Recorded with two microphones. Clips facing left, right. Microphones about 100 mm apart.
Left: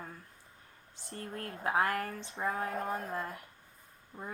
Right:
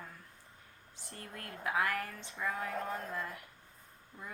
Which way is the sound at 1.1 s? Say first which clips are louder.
Left 6 dB; 30° left (ahead or behind).